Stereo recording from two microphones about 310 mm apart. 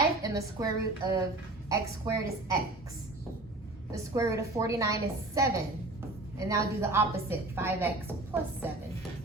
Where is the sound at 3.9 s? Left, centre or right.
Centre.